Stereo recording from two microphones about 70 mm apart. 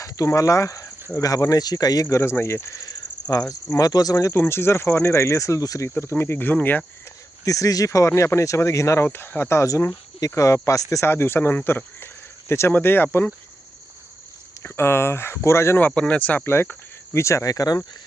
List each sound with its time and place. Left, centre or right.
0.3 s speech: left
2.3 s speech: left
2.8 s a sound: left
3.8 s speech: left
4.4 s speech: left
6.0 s speech: left
7.4 s speech: left
9.0 s speech: left
11.0 s speech: left
14.6 s speech: left
16.0 s speech: centre
16.5 s speech: left